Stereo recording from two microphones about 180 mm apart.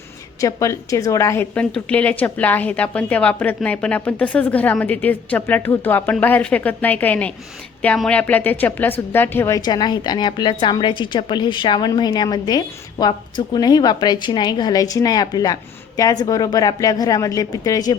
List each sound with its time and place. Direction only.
0.3 s a woman's voice: 20° left (ahead or behind)